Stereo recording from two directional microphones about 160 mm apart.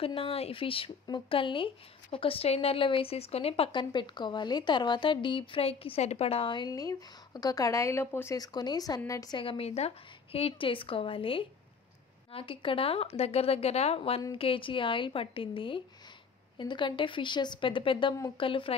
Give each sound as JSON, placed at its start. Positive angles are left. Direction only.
{"t": 0.0, "sound": "speech", "side_deg": 35}
{"t": 9.4, "sound": "speech", "side_deg": 35}